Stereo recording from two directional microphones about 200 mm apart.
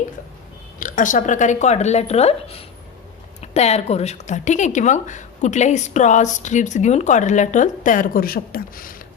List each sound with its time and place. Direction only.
0.8 s speech: 40° left (ahead or behind)